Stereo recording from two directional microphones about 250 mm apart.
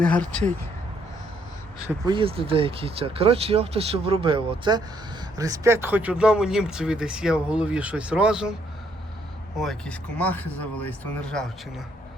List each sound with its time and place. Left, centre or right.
0.0 s speech: centre
1.9 s speech: centre
9.6 s speech: centre